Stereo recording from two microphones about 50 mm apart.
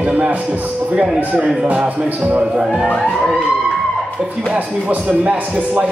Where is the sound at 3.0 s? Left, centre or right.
Centre.